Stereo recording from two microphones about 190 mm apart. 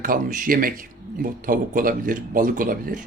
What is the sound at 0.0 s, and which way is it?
Speech, 45° right (ahead or behind).